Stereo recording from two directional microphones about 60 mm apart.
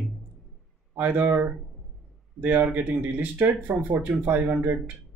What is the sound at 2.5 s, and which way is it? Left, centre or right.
Speech, right.